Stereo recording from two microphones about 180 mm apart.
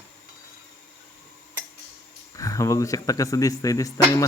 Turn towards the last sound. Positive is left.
turn(degrees=20)  # may be behind; listen again after turning